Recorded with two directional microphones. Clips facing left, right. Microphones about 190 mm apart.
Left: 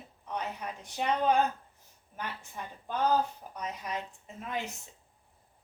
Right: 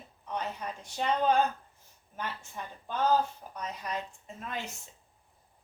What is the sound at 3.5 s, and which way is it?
A woman's voice, 15° left (ahead or behind).